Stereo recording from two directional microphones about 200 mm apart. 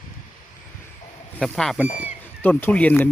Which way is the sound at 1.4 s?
Centre (ahead or behind).